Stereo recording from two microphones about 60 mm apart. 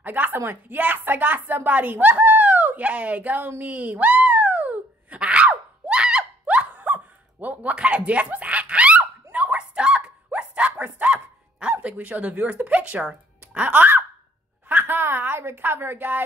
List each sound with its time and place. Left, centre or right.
0.0 s speech: right
2.8 s a sound: right
11.7 s a woman's voice: right